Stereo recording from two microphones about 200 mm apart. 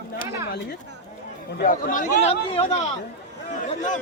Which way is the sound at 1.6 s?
45° left (ahead or behind).